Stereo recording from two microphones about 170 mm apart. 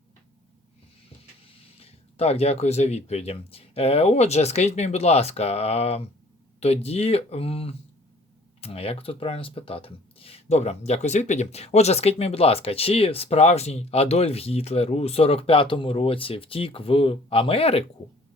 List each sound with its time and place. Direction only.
1.8 s speech: 35° left (ahead or behind)